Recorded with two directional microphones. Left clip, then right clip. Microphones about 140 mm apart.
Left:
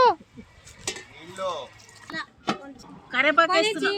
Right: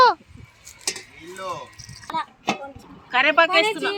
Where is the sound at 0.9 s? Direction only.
30° right (ahead or behind).